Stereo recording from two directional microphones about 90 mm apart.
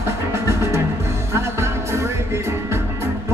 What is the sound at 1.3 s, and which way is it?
Music, 30° right (ahead or behind).